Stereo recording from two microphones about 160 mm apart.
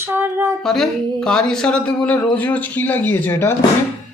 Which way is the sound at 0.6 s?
5° left (ahead or behind).